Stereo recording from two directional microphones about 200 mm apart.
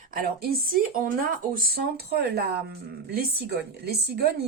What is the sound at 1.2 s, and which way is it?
A woman's voice, 45° right (ahead or behind).